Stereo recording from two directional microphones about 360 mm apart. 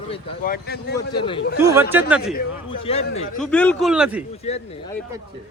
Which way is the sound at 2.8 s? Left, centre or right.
Centre.